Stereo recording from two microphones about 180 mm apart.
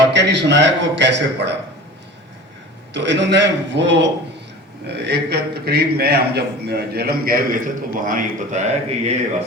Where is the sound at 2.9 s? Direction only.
75° right (ahead or behind).